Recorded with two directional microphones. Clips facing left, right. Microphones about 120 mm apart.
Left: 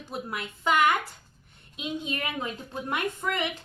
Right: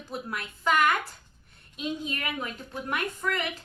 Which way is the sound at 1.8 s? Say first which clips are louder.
Even; 25° left (ahead or behind).